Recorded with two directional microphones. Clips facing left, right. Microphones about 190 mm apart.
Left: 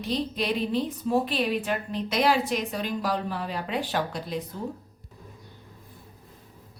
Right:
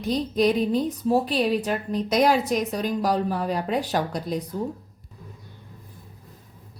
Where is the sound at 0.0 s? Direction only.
45° right (ahead or behind).